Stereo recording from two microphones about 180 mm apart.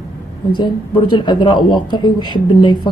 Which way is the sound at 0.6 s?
25° left (ahead or behind).